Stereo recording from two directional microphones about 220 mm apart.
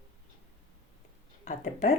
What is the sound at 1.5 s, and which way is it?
Speech, 30° left (ahead or behind).